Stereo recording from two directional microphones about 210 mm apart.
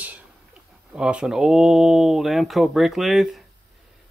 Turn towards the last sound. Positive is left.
turn(degrees=0)  # may be behind; listen again after turning